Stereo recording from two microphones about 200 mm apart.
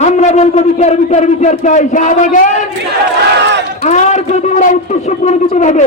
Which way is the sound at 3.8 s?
35° left (ahead or behind).